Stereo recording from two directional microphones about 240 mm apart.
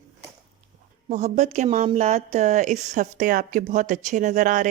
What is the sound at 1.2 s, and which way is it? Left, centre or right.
A woman's voice, right.